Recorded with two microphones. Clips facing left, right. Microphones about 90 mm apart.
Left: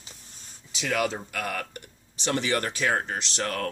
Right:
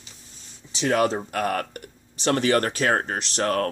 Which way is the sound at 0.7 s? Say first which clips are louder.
Right 6 dB; 35° right (ahead or behind).